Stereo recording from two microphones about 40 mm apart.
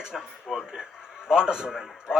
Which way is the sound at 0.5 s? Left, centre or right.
Centre.